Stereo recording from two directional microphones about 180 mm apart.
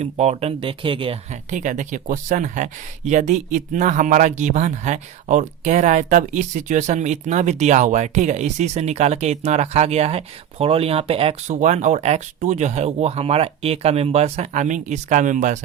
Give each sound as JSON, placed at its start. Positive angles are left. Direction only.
{"t": 0.0, "sound": "speech", "side_deg": -35}